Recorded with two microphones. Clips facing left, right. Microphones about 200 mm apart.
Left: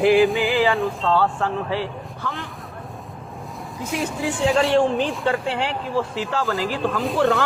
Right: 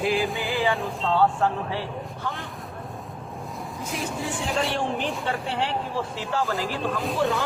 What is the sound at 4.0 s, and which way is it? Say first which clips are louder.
Speech: left 7 dB; centre (ahead or behind).